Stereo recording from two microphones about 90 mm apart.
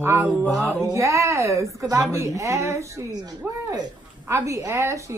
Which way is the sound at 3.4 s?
20° right (ahead or behind).